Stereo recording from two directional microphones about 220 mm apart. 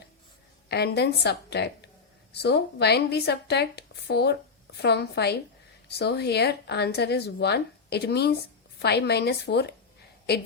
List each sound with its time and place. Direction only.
0.7 s speech: 50° left (ahead or behind)